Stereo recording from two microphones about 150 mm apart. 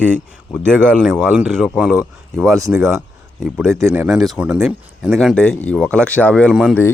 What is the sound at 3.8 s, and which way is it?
Speech, 20° right (ahead or behind).